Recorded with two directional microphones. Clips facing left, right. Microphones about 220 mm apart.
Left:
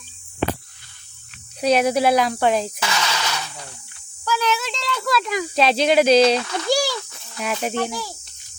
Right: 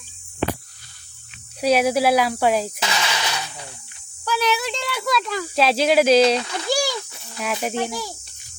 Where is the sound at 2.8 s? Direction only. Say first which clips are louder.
Even; 15° right (ahead or behind).